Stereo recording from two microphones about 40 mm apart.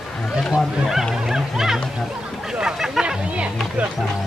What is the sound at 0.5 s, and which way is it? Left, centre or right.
Music, centre.